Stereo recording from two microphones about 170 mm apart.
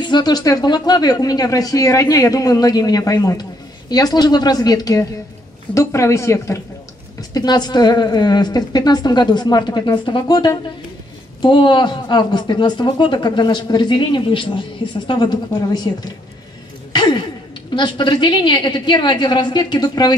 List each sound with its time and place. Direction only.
0.0 s a woman's voice: 25° left (ahead or behind)
16.9 s a sound: 25° left (ahead or behind)
17.7 s speech: 25° left (ahead or behind)